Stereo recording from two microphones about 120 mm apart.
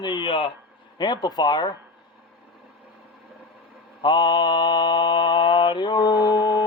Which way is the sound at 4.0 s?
40° left (ahead or behind).